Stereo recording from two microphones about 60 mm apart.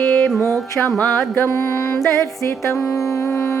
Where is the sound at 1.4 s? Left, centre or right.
Left.